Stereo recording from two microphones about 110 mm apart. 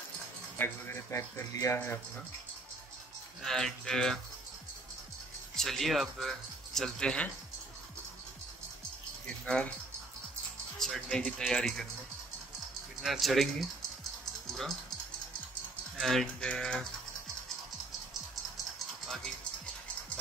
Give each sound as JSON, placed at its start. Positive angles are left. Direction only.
{"t": 0.6, "sound": "a man's voice", "side_deg": 20}
{"t": 3.4, "sound": "speech", "side_deg": 5}
{"t": 5.6, "sound": "speech", "side_deg": 5}
{"t": 9.2, "sound": "a sound", "side_deg": 10}
{"t": 10.8, "sound": "speech", "side_deg": 5}
{"t": 13.0, "sound": "speech", "side_deg": 0}
{"t": 16.0, "sound": "speech", "side_deg": 0}
{"t": 19.0, "sound": "music", "side_deg": 5}